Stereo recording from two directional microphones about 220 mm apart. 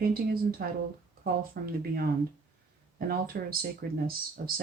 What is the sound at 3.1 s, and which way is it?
Speech, 40° right (ahead or behind).